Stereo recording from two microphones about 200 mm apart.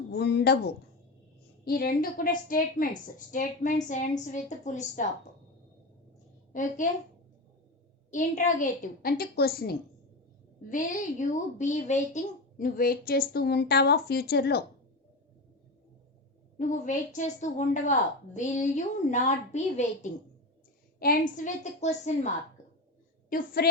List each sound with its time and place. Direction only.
0.1 s a woman's voice: 55° left (ahead or behind); by 5.0 s 35° left (ahead or behind)
6.5 s a woman's voice: 40° left (ahead or behind)
8.1 s a woman's voice: 40° left (ahead or behind)
10.7 s a woman's voice: 40° left (ahead or behind)
16.6 s a woman's voice: 40° left (ahead or behind)